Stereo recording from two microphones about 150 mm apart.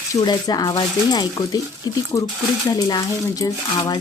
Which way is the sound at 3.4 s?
25° left (ahead or behind).